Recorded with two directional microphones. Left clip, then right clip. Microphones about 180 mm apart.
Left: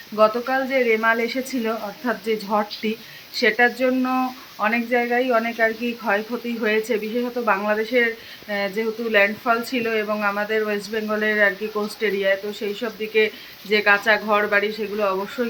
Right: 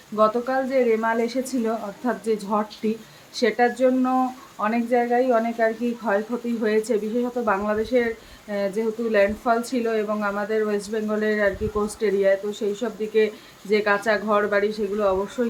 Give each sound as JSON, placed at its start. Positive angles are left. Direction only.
{"t": 0.2, "sound": "speech", "side_deg": -10}